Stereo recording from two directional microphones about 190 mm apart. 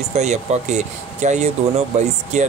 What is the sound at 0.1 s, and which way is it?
Speech, 35° right (ahead or behind).